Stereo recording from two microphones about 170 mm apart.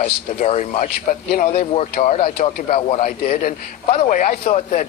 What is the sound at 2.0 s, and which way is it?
Speech, 35° left (ahead or behind).